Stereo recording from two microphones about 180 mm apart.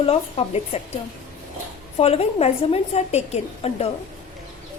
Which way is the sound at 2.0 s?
35° left (ahead or behind).